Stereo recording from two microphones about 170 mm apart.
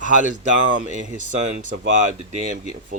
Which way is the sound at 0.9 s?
45° right (ahead or behind).